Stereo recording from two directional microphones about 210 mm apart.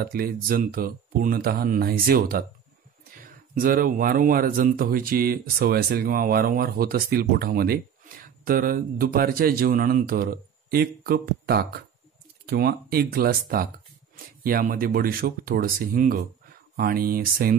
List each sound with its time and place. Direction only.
0.0 s speech: 45° right (ahead or behind)
3.5 s speech: 40° right (ahead or behind)